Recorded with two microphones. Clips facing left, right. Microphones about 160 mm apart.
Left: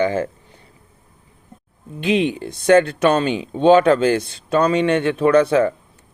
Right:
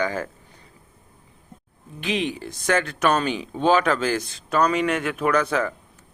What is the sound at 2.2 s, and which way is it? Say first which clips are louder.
Speech: left 6 dB; 30° left (ahead or behind).